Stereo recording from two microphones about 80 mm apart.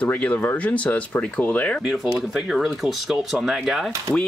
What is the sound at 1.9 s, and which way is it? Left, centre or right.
Speech, centre.